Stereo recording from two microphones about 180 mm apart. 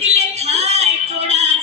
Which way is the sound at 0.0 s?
35° right (ahead or behind).